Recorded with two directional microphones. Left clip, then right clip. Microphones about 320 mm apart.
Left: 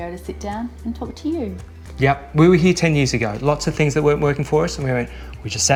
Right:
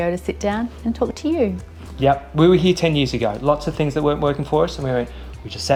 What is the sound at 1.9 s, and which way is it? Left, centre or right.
A man's voice, centre.